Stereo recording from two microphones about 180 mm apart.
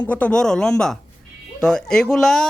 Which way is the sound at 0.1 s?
5° left (ahead or behind).